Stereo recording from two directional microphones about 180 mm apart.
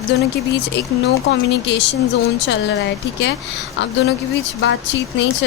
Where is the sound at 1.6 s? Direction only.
75° left (ahead or behind).